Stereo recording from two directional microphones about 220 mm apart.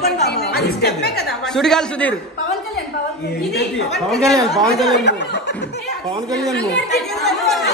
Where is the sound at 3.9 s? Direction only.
Centre (ahead or behind).